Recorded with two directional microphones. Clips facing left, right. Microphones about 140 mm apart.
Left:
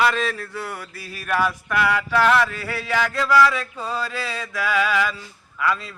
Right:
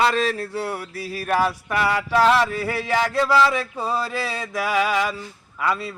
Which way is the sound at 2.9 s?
30° right (ahead or behind).